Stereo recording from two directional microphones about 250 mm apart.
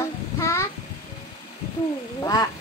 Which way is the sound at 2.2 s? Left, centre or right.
Centre.